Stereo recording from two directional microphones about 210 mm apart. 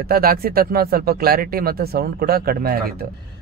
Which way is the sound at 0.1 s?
45° right (ahead or behind).